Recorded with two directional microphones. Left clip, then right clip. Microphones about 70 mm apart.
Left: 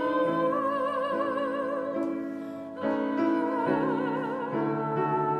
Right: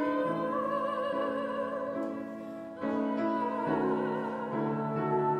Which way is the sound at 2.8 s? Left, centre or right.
Left.